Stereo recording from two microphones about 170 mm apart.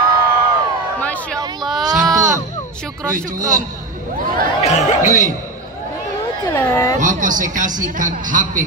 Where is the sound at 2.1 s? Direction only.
20° right (ahead or behind).